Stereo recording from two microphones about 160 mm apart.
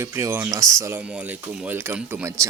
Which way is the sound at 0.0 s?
15° right (ahead or behind).